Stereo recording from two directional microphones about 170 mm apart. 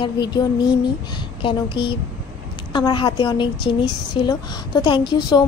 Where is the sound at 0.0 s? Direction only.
25° left (ahead or behind).